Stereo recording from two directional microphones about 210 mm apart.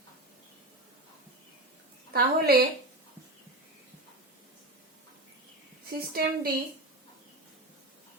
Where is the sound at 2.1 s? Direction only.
50° right (ahead or behind).